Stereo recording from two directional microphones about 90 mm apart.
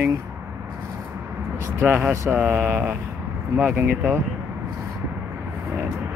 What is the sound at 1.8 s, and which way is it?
Mantra, 25° right (ahead or behind).